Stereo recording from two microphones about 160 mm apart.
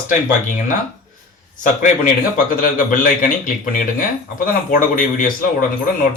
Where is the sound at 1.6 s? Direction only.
55° left (ahead or behind).